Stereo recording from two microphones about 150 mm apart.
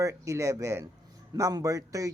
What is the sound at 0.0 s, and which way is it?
A man's voice, 20° right (ahead or behind).